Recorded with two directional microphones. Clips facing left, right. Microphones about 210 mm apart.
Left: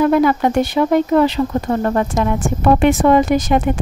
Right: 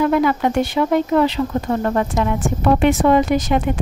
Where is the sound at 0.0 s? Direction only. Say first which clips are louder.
Left 3 dB; 40° left (ahead or behind).